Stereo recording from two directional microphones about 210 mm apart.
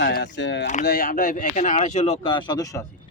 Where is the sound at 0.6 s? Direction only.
40° left (ahead or behind); by 2.8 s 15° left (ahead or behind).